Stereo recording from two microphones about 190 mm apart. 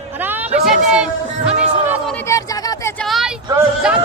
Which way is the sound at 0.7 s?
5° right (ahead or behind).